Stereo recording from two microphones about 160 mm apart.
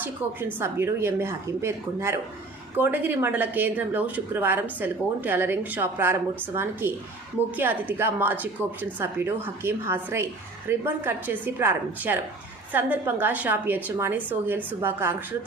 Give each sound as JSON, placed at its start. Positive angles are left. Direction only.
{"t": 0.0, "sound": "speech", "side_deg": -10}